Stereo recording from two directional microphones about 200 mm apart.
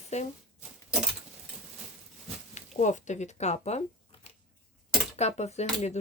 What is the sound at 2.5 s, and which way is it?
Speech, 35° left (ahead or behind).